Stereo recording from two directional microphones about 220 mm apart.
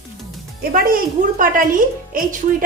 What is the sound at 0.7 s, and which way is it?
Speech, 40° right (ahead or behind).